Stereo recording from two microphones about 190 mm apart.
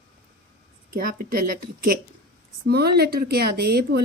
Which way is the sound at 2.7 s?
55° right (ahead or behind).